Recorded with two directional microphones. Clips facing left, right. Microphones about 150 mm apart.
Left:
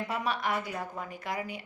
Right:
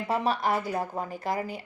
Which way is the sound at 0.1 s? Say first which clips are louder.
Right 7 dB; 35° right (ahead or behind).